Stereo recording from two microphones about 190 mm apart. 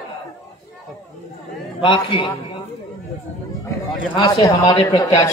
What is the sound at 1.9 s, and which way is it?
Speech, 25° left (ahead or behind).